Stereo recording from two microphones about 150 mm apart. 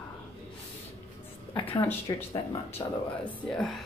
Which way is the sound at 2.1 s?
25° left (ahead or behind).